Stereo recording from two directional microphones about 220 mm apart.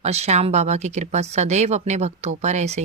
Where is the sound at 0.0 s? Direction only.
30° right (ahead or behind).